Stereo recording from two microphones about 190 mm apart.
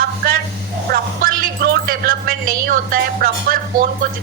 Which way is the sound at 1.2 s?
50° right (ahead or behind).